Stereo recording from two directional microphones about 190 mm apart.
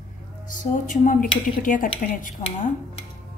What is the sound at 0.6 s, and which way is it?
A woman's voice, 45° left (ahead or behind).